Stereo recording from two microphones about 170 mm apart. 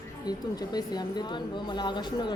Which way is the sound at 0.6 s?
25° left (ahead or behind).